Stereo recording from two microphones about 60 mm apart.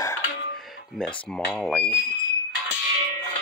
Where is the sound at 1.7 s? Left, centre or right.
Left.